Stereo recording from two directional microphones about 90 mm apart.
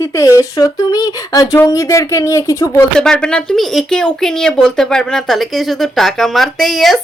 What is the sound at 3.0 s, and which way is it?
Speech, 10° left (ahead or behind).